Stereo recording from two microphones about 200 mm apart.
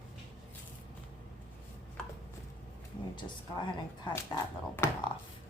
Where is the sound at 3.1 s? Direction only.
25° left (ahead or behind).